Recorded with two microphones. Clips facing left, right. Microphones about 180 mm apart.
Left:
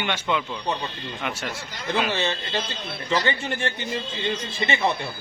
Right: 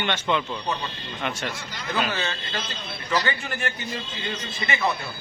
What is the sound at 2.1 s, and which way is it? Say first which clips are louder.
A man's voice: left 4 dB; 25° left (ahead or behind).